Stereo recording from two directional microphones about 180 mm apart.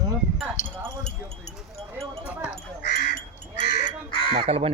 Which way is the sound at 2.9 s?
70° left (ahead or behind).